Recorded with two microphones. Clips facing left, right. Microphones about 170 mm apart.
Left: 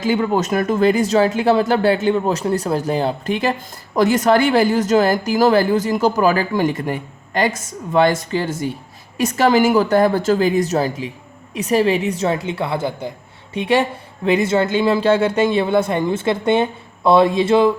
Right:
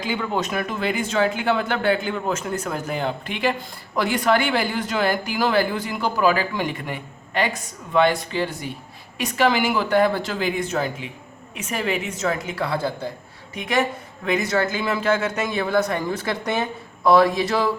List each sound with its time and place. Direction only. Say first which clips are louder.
0.0 s a woman's voice: left 7 dB; 40° left (ahead or behind); by 17.7 s 25° left (ahead or behind)